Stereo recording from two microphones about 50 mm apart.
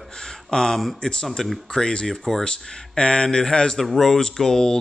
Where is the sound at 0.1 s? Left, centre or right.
Centre.